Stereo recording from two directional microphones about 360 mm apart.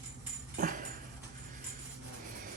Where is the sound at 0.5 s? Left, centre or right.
Right.